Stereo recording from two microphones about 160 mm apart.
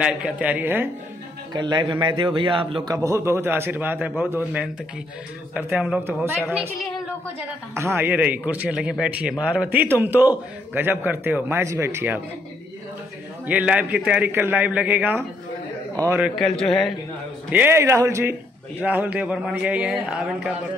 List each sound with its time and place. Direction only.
0.0 s a man's voice: 5° right (ahead or behind)
1.5 s a man's voice: 25° right (ahead or behind); by 4.1 s 10° right (ahead or behind)
5.5 s a man's voice: 5° right (ahead or behind)
7.7 s a man's voice: 15° right (ahead or behind)
13.5 s a man's voice: 10° right (ahead or behind)
16.3 s a man's voice: centre (ahead or behind)
17.5 s a man's voice: 10° right (ahead or behind)